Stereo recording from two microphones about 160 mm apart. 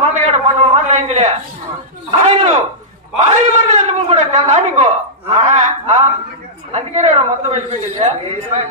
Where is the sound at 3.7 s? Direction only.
45° right (ahead or behind).